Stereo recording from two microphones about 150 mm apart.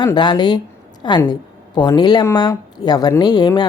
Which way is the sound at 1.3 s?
30° left (ahead or behind).